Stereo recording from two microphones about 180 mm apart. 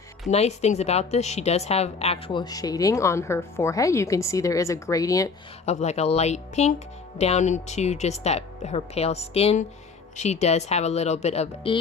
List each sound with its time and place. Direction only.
0.3 s a woman's voice: 40° left (ahead or behind); by 5.3 s 20° left (ahead or behind)
5.6 s speech: 40° left (ahead or behind)